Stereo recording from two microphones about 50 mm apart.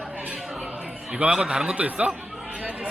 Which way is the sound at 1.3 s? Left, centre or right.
Centre.